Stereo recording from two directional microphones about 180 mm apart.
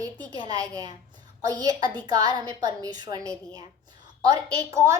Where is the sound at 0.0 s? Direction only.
25° right (ahead or behind).